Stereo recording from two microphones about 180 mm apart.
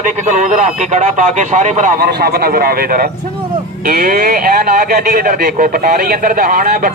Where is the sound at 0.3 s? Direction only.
45° right (ahead or behind).